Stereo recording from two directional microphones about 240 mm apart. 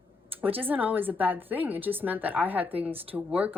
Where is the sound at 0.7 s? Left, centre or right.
Centre.